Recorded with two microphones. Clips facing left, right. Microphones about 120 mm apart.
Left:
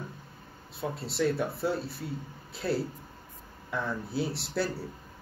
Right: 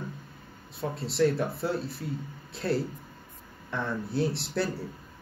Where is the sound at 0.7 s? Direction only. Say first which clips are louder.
Right 4 dB; centre (ahead or behind).